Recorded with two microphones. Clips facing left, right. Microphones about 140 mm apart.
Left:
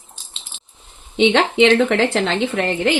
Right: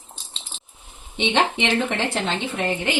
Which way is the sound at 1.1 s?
90° left.